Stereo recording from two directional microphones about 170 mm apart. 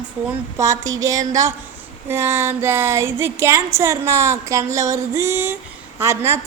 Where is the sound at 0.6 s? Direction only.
20° right (ahead or behind).